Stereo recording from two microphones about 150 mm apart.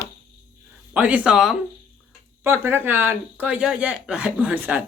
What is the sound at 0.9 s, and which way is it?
Speech, 10° right (ahead or behind).